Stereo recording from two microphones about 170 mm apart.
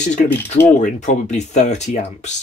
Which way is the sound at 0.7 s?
45° left (ahead or behind).